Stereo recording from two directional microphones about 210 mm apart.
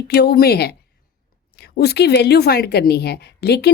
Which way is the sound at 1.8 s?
50° left (ahead or behind).